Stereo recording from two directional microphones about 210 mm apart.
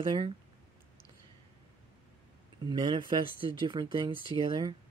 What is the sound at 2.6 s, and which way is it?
Speech, 20° right (ahead or behind).